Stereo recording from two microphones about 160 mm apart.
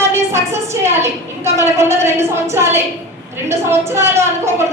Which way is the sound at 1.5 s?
15° right (ahead or behind).